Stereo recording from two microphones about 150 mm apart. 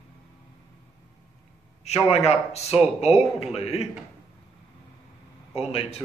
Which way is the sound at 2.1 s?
45° left (ahead or behind).